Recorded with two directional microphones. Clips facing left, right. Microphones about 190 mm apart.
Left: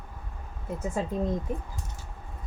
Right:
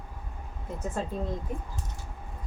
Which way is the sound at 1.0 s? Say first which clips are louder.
Left 2 dB; 10° left (ahead or behind).